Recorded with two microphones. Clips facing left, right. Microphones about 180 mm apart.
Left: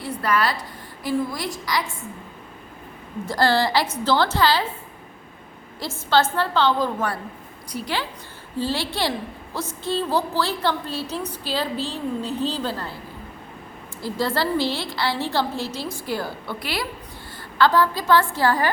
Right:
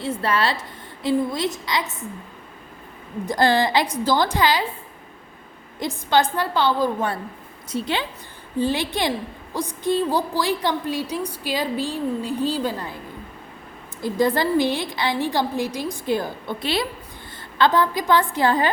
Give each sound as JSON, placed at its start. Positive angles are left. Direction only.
{"t": 0.0, "sound": "a woman's voice", "side_deg": -25}
{"t": 3.2, "sound": "a woman's voice", "side_deg": -20}
{"t": 5.8, "sound": "a woman's voice", "side_deg": -15}
{"t": 7.7, "sound": "a woman's voice", "side_deg": -25}
{"t": 14.0, "sound": "a woman's voice", "side_deg": -15}